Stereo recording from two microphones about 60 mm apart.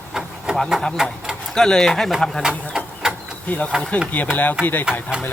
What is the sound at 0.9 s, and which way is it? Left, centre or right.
Speech, centre.